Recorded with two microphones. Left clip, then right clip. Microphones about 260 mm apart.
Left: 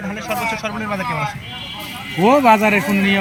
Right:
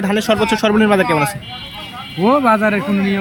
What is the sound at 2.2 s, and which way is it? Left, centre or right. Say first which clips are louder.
Speech: left 1 dB; centre.